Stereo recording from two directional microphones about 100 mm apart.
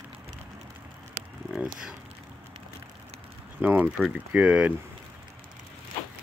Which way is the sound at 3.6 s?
15° right (ahead or behind).